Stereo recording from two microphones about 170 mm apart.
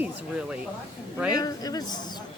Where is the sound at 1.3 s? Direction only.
20° left (ahead or behind).